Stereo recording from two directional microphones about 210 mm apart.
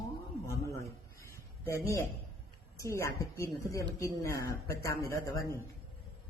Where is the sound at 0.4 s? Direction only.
15° left (ahead or behind).